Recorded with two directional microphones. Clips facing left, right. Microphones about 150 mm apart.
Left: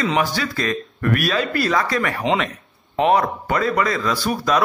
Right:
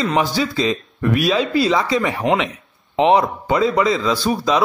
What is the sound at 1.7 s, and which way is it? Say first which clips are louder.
Speech: right 3 dB; 15° right (ahead or behind).